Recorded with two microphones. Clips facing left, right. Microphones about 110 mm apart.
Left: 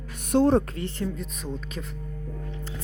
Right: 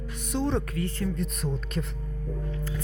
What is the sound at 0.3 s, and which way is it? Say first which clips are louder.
Speech: left 8 dB; 50° left (ahead or behind).